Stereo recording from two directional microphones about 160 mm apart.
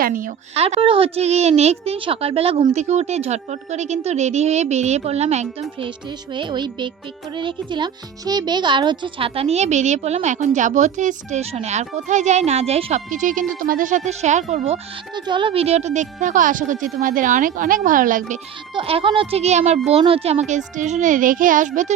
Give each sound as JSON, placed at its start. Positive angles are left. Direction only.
{"t": 0.0, "sound": "speech", "side_deg": -60}
{"t": 0.5, "sound": "a child's voice", "side_deg": -40}
{"t": 6.3, "sound": "a child's voice", "side_deg": -30}
{"t": 15.1, "sound": "speech", "side_deg": -30}
{"t": 18.7, "sound": "a child's voice", "side_deg": -35}